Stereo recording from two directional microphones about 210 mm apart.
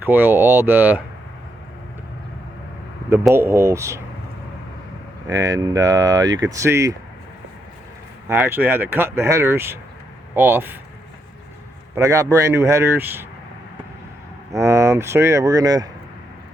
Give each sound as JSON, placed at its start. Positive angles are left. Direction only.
{"t": 0.0, "sound": "speech", "side_deg": -10}
{"t": 3.1, "sound": "speech", "side_deg": -10}
{"t": 5.3, "sound": "speech", "side_deg": -15}
{"t": 8.3, "sound": "speech", "side_deg": -10}
{"t": 11.9, "sound": "speech", "side_deg": -15}
{"t": 14.5, "sound": "speech", "side_deg": -15}